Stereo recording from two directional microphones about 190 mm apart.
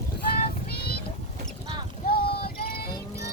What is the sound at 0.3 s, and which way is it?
Child singing, 50° left (ahead or behind).